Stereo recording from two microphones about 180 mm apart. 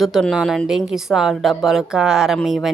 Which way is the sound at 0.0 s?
Centre (ahead or behind).